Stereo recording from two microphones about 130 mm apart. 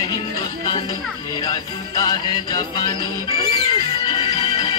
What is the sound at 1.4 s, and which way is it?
Music, 30° left (ahead or behind).